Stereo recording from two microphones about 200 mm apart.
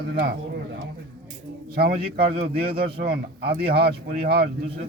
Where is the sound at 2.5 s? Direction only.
50° right (ahead or behind).